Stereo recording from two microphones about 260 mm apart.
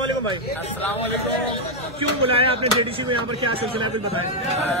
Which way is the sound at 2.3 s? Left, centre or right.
Right.